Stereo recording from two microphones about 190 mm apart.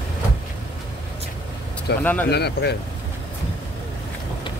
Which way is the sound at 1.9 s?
60° left (ahead or behind).